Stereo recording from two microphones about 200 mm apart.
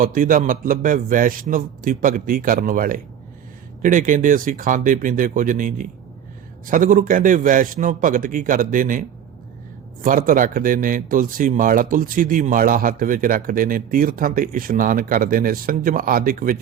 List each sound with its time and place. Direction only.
0.0 s speech: 45° right (ahead or behind)